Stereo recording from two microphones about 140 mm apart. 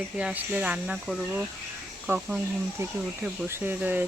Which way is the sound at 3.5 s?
15° right (ahead or behind).